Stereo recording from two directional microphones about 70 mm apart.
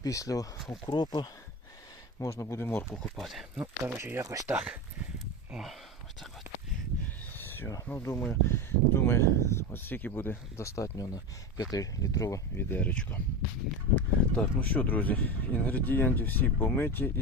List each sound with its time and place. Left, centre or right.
0.0 s speech: left
0.7 s speech: left
2.1 s speech: left
2.9 s speech: centre
3.8 s speech: right
4.5 s speech: centre
7.3 s a sound: left
7.9 s speech: left
10.6 s speech: left
10.9 s speech: left
12.5 s speech: left
13.9 s speech: left